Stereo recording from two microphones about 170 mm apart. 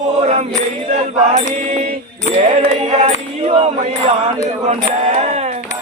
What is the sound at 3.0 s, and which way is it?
Music, 35° right (ahead or behind).